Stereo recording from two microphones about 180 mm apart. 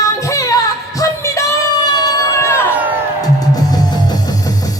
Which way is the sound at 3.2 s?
20° left (ahead or behind).